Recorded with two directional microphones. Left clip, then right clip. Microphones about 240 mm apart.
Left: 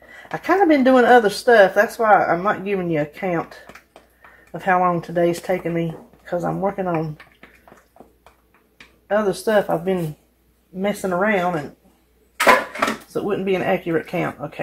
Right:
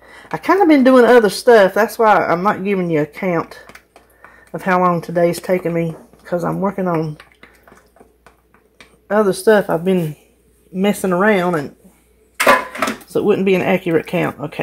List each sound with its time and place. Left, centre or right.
0.3 s speech: right
9.0 s speech: right
13.1 s speech: right